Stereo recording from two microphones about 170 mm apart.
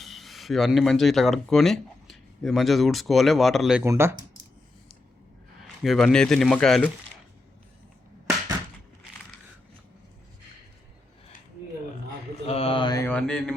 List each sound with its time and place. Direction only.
0.0 s speech: centre (ahead or behind)
3.8 s speech: 15° right (ahead or behind)
5.8 s speech: centre (ahead or behind)
12.5 s mantra: 35° left (ahead or behind)
13.1 s a sound: 5° left (ahead or behind)